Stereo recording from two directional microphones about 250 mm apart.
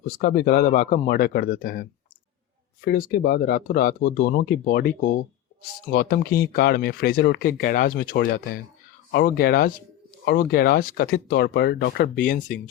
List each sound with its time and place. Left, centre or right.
0.0 s speech: left